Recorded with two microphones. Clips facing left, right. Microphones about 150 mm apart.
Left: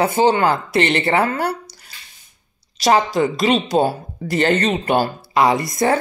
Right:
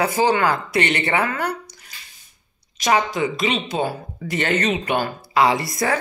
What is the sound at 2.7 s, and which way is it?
Speech, 35° left (ahead or behind).